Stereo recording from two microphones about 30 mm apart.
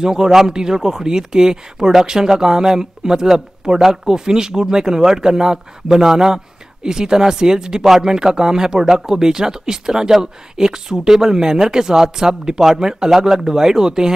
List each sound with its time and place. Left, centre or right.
0.0 s speech: right